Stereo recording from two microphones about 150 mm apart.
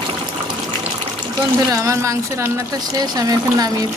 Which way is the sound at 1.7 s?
25° right (ahead or behind).